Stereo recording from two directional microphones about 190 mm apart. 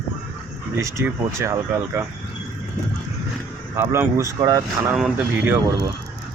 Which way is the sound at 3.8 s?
10° right (ahead or behind).